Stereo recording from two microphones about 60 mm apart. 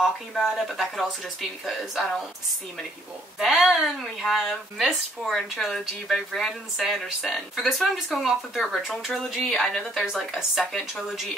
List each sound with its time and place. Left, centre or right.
0.0 s speech: centre
3.3 s speech: centre